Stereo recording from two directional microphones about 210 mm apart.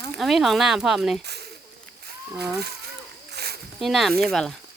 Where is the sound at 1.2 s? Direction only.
50° right (ahead or behind).